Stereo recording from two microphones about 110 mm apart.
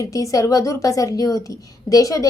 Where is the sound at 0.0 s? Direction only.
30° left (ahead or behind).